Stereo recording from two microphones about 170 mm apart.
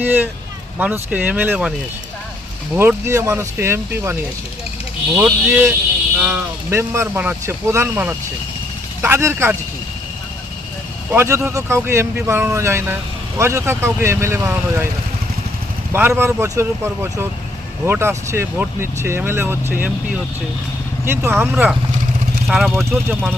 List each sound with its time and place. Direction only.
0.0 s speech: 10° right (ahead or behind)
2.7 s speech: 15° right (ahead or behind)
11.1 s speech: 15° right (ahead or behind)
15.9 s speech: 10° right (ahead or behind)
21.0 s speech: 15° right (ahead or behind)